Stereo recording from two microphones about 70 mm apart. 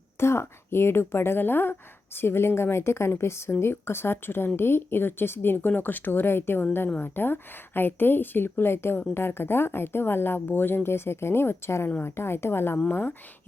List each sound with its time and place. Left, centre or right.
0.2 s speech: left